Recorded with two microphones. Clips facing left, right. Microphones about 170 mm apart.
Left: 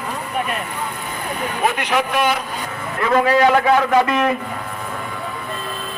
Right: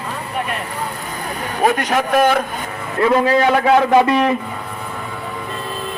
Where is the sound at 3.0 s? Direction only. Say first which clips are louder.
Right 1 dB; 30° right (ahead or behind).